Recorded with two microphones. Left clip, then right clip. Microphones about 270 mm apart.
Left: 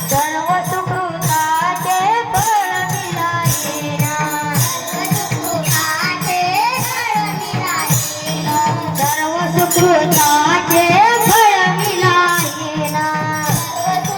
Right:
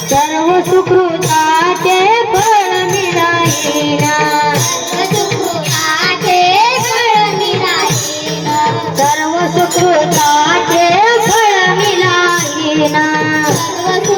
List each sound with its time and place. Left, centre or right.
10.9 s music: right